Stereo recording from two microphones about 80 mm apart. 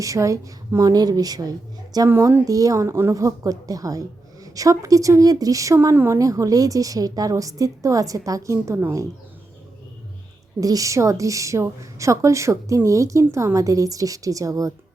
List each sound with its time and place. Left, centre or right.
0.0 s a woman's voice: right
0.9 s a woman's voice: right
5.9 s a woman's voice: right
6.1 s a woman's voice: right
10.6 s a woman's voice: right